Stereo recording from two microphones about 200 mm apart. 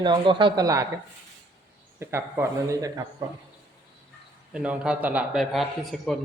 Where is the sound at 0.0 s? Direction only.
25° right (ahead or behind).